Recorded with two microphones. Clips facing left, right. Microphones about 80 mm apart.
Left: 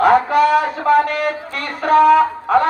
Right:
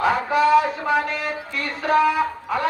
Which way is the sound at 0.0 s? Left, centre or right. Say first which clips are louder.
Left 6 dB; left.